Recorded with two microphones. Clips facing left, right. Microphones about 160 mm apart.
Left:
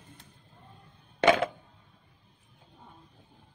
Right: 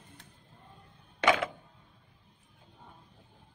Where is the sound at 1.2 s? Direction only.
30° left (ahead or behind).